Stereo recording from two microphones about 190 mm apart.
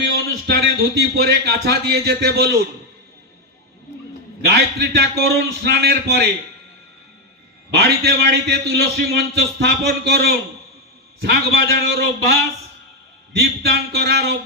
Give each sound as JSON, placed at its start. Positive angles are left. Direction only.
{"t": 0.1, "sound": "a man's voice", "side_deg": -60}
{"t": 4.4, "sound": "a man's voice", "side_deg": -55}
{"t": 7.7, "sound": "a man's voice", "side_deg": -60}
{"t": 13.3, "sound": "a man's voice", "side_deg": -60}